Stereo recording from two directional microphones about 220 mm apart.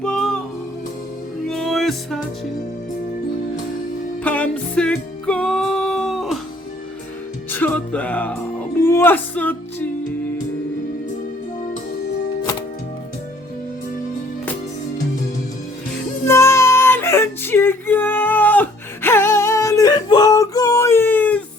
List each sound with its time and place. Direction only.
0.0 s music: centre (ahead or behind)
1.5 s music: centre (ahead or behind)
4.2 s music: 5° left (ahead or behind)
7.5 s music: 5° left (ahead or behind)
16.2 s music: 10° left (ahead or behind)